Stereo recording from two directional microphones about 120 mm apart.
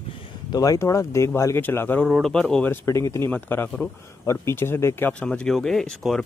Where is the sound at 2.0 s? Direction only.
Centre (ahead or behind).